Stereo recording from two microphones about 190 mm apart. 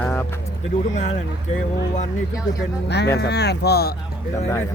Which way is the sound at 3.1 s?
60° left (ahead or behind).